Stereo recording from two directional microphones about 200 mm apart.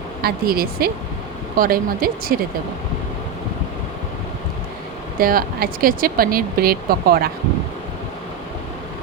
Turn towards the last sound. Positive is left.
turn(degrees=-50)  # may be behind; listen again after turning